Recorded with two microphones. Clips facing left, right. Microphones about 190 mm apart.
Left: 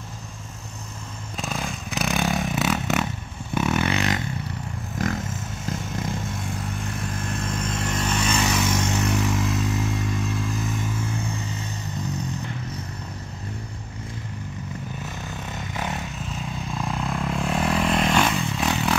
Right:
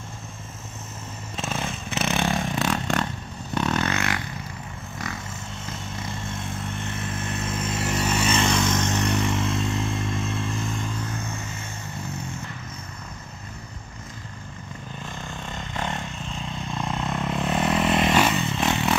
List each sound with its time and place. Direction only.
1.3 s motorcycle: centre (ahead or behind)
3.5 s vehicle: 10° left (ahead or behind)
5.7 s vehicle: centre (ahead or behind)
15.2 s vehicle: 5° left (ahead or behind)